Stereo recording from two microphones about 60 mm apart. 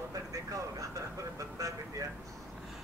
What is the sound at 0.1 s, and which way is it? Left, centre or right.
Vehicle, right.